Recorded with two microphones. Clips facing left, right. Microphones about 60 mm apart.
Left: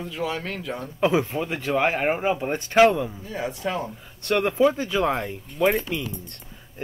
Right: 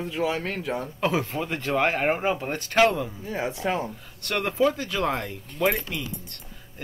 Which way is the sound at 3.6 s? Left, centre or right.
Right.